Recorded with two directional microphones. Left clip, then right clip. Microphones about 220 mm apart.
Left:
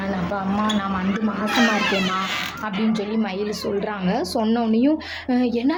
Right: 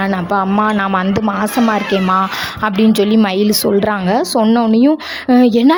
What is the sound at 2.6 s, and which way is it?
A woman's voice, 50° right (ahead or behind).